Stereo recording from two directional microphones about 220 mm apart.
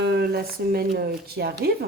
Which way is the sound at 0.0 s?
45° right (ahead or behind).